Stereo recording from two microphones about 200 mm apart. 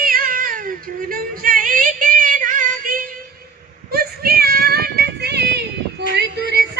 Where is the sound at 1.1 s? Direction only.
45° right (ahead or behind).